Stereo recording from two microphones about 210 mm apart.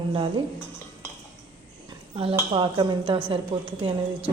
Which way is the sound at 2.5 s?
25° right (ahead or behind).